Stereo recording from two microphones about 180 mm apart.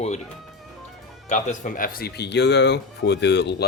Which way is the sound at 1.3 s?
40° left (ahead or behind).